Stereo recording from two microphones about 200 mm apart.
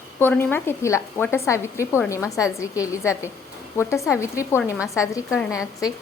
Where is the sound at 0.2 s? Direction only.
10° left (ahead or behind).